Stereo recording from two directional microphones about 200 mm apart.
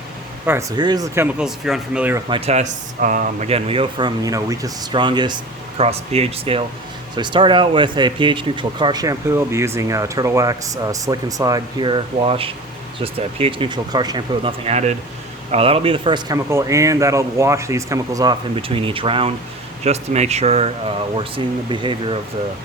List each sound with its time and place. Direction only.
0.5 s speech: 10° right (ahead or behind)
2.3 s speech: 35° right (ahead or behind)